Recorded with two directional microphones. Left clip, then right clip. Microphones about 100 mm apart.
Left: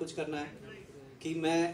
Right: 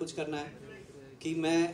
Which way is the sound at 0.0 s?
25° right (ahead or behind).